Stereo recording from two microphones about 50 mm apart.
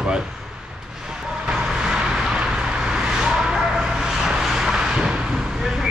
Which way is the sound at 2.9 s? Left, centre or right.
Centre.